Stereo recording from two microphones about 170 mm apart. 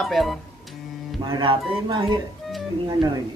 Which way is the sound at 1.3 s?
30° right (ahead or behind).